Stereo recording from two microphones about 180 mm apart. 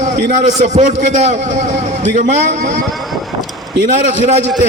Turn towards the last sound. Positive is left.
turn(degrees=-40)  # may be behind; listen again after turning